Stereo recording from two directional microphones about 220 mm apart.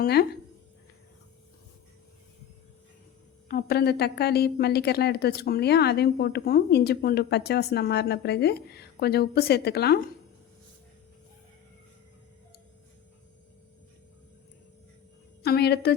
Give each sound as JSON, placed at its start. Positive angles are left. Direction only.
{"t": 0.0, "sound": "a woman's voice", "side_deg": 45}
{"t": 3.5, "sound": "a woman's voice", "side_deg": 45}
{"t": 15.4, "sound": "a woman's voice", "side_deg": 45}